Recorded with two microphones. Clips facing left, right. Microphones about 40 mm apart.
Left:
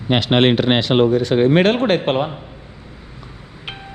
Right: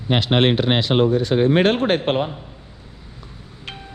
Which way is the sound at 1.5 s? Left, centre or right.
Left.